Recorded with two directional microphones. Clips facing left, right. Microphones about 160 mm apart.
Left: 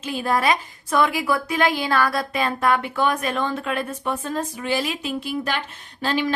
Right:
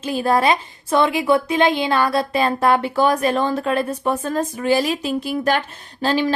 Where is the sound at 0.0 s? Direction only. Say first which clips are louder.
Right 4 dB; 35° right (ahead or behind).